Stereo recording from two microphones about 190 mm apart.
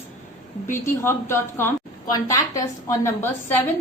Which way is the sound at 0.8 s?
15° left (ahead or behind).